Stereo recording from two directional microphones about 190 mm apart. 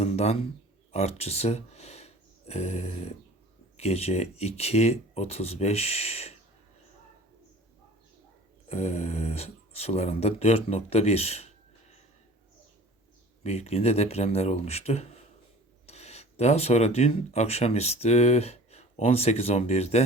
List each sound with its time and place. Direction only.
0.0 s a sound: 35° left (ahead or behind)
0.9 s speech: 35° left (ahead or behind)
8.7 s speech: 35° left (ahead or behind)
13.4 s speech: 35° left (ahead or behind)